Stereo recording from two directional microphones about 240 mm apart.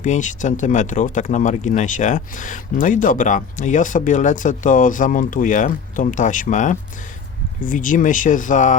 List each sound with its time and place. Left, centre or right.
0.0 s speech: left